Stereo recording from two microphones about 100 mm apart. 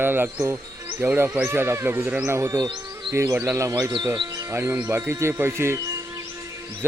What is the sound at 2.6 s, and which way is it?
Insect, 50° right (ahead or behind).